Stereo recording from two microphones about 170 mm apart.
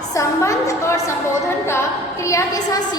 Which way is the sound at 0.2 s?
20° left (ahead or behind).